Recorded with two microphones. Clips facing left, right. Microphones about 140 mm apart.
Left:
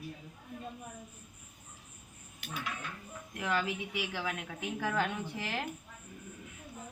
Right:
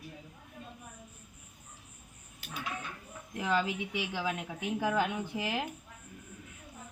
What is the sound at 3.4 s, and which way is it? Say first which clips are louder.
Speech: right 3 dB; 20° right (ahead or behind).